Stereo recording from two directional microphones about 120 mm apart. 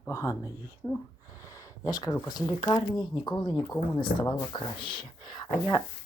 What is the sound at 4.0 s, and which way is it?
Speech, 40° left (ahead or behind).